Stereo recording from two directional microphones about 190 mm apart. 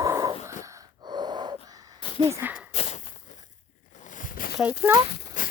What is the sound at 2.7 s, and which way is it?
Walk, 35° left (ahead or behind).